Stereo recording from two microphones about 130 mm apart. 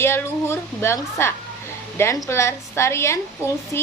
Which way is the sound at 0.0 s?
20° left (ahead or behind).